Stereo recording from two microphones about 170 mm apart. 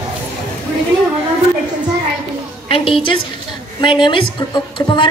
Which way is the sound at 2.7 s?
30° left (ahead or behind).